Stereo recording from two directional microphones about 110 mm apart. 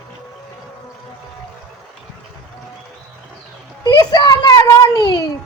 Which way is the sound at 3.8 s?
30° left (ahead or behind).